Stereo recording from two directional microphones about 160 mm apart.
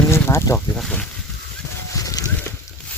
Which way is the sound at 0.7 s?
5° left (ahead or behind).